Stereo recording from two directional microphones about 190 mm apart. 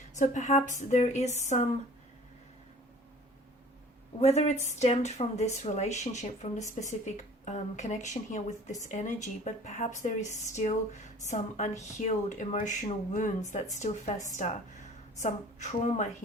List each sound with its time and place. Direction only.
0.2 s speech: 40° left (ahead or behind)
4.2 s speech: 35° left (ahead or behind)